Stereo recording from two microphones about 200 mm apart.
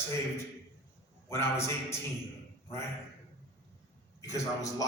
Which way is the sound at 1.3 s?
15° left (ahead or behind).